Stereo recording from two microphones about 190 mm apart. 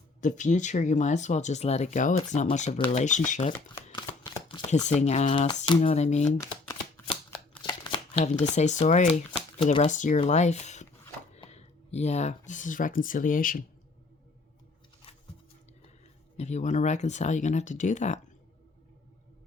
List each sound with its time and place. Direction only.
0.2 s speech: 40° left (ahead or behind)
3.9 s shuffling cards: 20° left (ahead or behind)
4.9 s speech: 35° left (ahead or behind)
6.4 s a sound: 15° left (ahead or behind)
7.1 s shuffling cards: 25° left (ahead or behind)
8.2 s speech: 35° left (ahead or behind)
16.4 s speech: 35° left (ahead or behind)